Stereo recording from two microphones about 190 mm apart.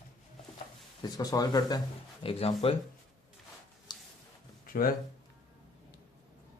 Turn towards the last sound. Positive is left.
turn(degrees=50)  # may be behind; listen again after turning